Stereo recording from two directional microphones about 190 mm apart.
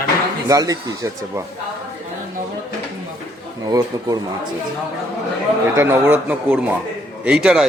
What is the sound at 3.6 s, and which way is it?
Speech, 20° right (ahead or behind).